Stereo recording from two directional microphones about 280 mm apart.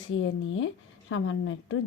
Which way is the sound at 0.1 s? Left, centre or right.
Left.